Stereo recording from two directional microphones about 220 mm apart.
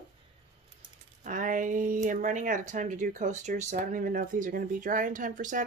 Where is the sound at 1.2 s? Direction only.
35° right (ahead or behind).